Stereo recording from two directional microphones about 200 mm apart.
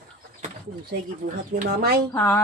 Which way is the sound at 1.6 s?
50° right (ahead or behind).